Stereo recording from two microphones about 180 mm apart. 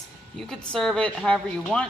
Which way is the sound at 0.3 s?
Centre (ahead or behind).